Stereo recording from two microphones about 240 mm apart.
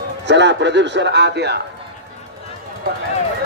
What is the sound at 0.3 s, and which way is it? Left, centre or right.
Speech, right.